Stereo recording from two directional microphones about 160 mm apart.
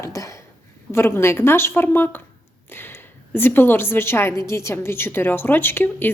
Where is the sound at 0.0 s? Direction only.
20° left (ahead or behind).